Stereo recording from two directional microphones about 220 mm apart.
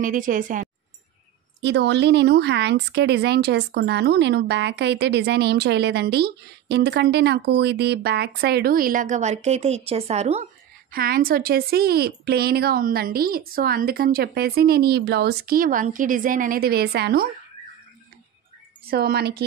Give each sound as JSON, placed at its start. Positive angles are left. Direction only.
{"t": 0.0, "sound": "speech", "side_deg": -35}
{"t": 1.6, "sound": "a woman's voice", "side_deg": -50}
{"t": 10.9, "sound": "a woman's voice", "side_deg": -40}
{"t": 18.9, "sound": "a woman's voice", "side_deg": -45}